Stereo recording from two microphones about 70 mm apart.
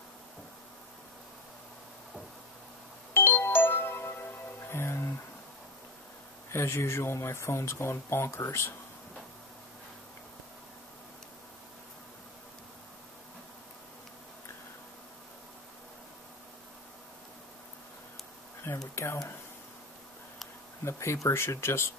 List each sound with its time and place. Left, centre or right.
3.1 s music: left
6.5 s speech: left
18.9 s speech: left
20.8 s speech: left